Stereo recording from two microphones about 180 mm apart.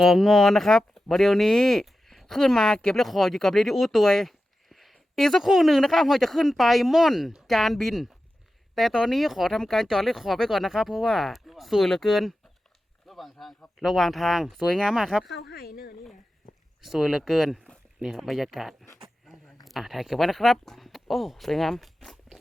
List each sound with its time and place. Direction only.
0.0 s speech: centre (ahead or behind)
15.4 s speech: 60° left (ahead or behind)
16.8 s speech: centre (ahead or behind)